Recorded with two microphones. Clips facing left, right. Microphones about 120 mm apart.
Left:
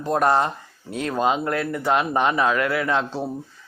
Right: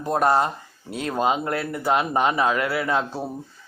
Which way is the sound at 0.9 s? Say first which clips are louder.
Left 2 dB; 40° right (ahead or behind).